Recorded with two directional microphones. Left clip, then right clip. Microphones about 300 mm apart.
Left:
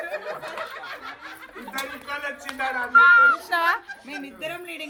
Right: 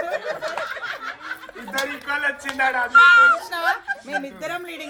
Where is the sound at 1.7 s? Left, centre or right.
Right.